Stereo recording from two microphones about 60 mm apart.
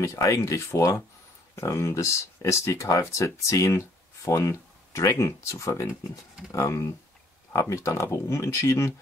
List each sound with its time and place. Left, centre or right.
0.0 s speech: left